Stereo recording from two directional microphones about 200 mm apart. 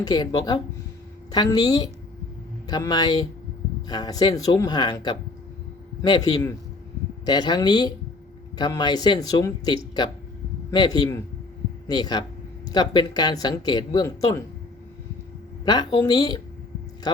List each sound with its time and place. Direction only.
0.0 s speech: 20° left (ahead or behind)
15.6 s speech: 20° left (ahead or behind)